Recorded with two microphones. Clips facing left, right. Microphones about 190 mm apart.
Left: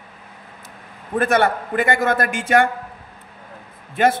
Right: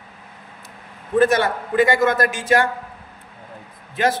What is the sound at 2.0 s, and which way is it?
Speech, 55° left (ahead or behind).